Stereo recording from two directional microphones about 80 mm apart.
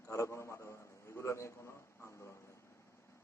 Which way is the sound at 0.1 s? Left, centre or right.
Left.